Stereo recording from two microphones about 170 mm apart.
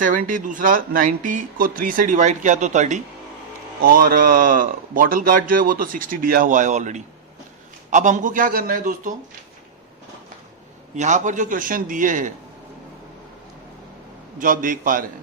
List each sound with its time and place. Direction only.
0.0 s speech: 50° right (ahead or behind)
3.8 s speech: 60° right (ahead or behind)
10.9 s speech: 45° right (ahead or behind)
14.3 s speech: 50° right (ahead or behind)